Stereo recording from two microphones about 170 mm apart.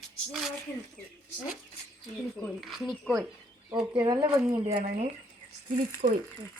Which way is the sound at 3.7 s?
25° right (ahead or behind).